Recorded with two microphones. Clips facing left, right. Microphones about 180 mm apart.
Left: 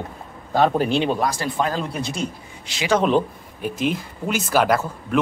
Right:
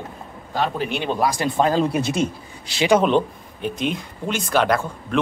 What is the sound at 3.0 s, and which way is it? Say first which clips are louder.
Speech: even; 5° left (ahead or behind).